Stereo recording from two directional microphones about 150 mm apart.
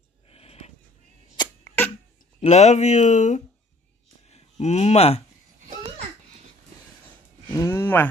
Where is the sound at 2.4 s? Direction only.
50° left (ahead or behind).